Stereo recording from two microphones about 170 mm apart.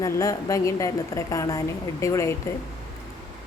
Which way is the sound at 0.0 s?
20° left (ahead or behind).